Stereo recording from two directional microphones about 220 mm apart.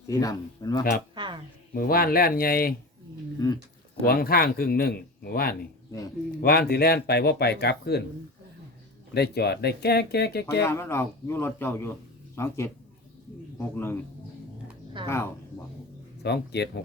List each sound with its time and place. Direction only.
0.1 s speech: 15° left (ahead or behind)
1.1 s a sound: 20° right (ahead or behind)
1.7 s speech: 40° left (ahead or behind)
3.3 s speech: 15° left (ahead or behind)
4.0 s speech: 45° left (ahead or behind)
9.1 s speech: 45° left (ahead or behind)
10.6 s speech: 10° left (ahead or behind)
15.0 s a woman's voice: 20° right (ahead or behind)
16.2 s speech: 50° left (ahead or behind)